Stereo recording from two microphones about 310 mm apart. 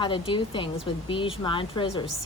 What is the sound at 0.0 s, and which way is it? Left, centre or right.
A woman's voice, centre.